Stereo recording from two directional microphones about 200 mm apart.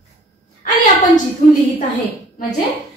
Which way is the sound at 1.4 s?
40° left (ahead or behind).